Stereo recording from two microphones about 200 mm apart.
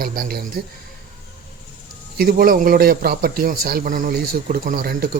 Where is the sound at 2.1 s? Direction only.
45° right (ahead or behind).